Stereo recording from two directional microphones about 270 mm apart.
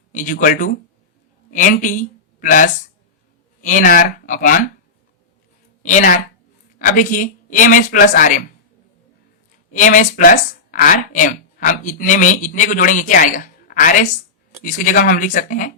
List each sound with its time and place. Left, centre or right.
0.1 s speech: left
5.8 s speech: left
9.7 s speech: left